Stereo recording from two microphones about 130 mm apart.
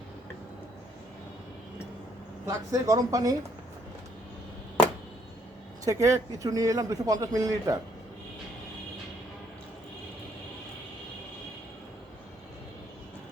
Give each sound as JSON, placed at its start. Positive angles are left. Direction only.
{"t": 2.5, "sound": "speech", "side_deg": -25}
{"t": 5.8, "sound": "speech", "side_deg": -25}